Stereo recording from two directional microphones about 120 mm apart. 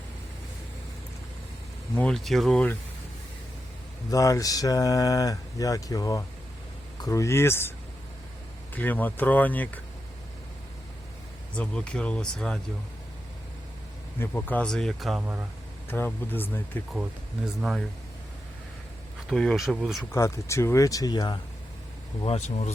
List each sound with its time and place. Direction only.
2.0 s speech: 5° left (ahead or behind)
4.1 s speech: 30° left (ahead or behind)
8.7 s speech: 15° left (ahead or behind)
11.5 s speech: 10° left (ahead or behind)
14.2 s speech: 15° left (ahead or behind); by 15.2 s centre (ahead or behind)
15.9 s speech: 15° left (ahead or behind)
17.4 s speech: 5° right (ahead or behind)
19.3 s speech: centre (ahead or behind)
20.1 s speech: 25° left (ahead or behind)
22.2 s speech: 60° left (ahead or behind)